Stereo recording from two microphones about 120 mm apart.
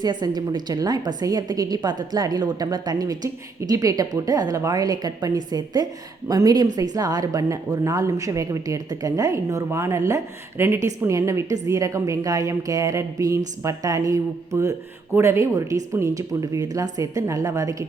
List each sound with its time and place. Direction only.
0.0 s a woman's voice: 35° right (ahead or behind)